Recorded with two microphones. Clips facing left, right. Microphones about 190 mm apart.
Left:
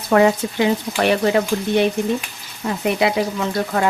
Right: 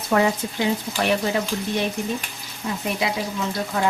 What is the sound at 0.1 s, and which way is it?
Stir, 65° left (ahead or behind).